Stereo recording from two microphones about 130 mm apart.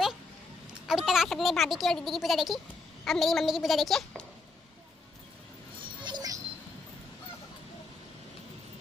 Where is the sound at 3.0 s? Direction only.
Centre (ahead or behind).